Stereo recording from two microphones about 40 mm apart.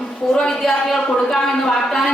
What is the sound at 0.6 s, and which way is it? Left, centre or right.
Speech, centre.